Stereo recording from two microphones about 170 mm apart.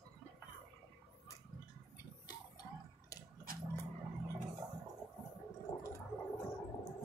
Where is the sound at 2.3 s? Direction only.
25° left (ahead or behind).